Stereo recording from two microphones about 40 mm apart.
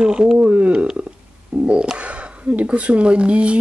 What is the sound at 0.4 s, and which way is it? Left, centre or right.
Speech, right.